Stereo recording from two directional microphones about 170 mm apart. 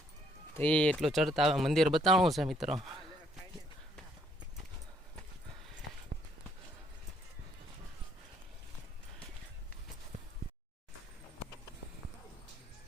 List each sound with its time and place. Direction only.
0.5 s speech: 10° left (ahead or behind)
6.1 s walk: 60° right (ahead or behind)